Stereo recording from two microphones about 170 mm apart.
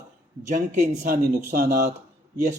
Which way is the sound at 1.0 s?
60° right (ahead or behind).